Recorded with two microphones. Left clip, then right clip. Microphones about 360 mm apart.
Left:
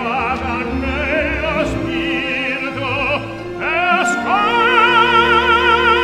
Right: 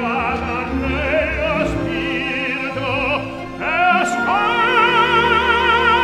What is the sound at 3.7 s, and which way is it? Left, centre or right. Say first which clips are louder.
Music: even; left.